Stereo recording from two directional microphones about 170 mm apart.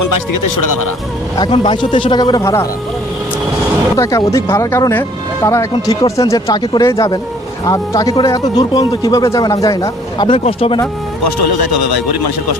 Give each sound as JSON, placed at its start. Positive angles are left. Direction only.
{"t": 1.4, "sound": "speech", "side_deg": 30}
{"t": 3.9, "sound": "speech", "side_deg": 20}